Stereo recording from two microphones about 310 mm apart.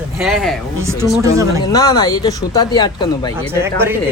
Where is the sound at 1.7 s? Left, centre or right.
Centre.